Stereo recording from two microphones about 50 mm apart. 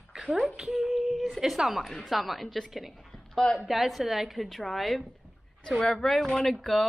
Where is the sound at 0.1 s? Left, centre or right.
Centre.